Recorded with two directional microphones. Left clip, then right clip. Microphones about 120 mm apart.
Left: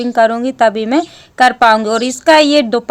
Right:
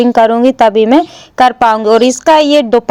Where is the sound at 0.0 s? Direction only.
45° right (ahead or behind).